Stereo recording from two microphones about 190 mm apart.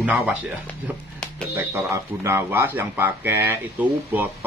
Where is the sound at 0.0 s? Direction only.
10° right (ahead or behind).